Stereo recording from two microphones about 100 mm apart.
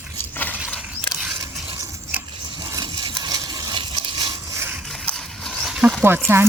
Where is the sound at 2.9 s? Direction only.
50° right (ahead or behind).